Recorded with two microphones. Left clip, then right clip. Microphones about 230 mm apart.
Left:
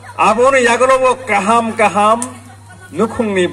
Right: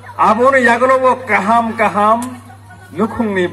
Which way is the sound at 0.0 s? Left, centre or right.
Left.